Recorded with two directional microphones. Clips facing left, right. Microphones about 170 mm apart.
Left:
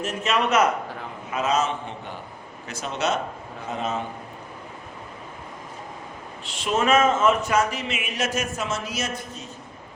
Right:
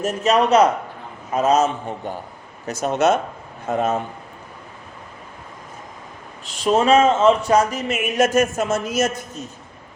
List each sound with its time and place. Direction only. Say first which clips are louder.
0.0 s a man's voice: right 6 dB; 40° right (ahead or behind)
6.4 s speech: right 6 dB; 40° right (ahead or behind)